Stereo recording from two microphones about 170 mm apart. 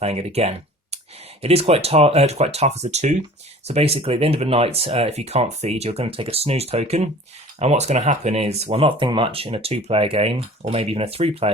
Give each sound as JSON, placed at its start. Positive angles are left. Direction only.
{"t": 0.0, "sound": "speech", "side_deg": -40}